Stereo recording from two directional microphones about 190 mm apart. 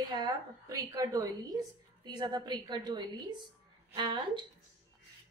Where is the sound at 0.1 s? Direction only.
20° right (ahead or behind).